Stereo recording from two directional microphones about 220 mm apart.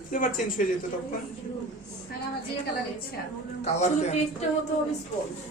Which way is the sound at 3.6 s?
30° left (ahead or behind).